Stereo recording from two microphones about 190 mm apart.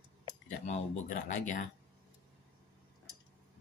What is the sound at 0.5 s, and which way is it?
Speech, 40° left (ahead or behind).